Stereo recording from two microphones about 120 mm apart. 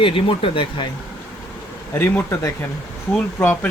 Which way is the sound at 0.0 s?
50° left (ahead or behind).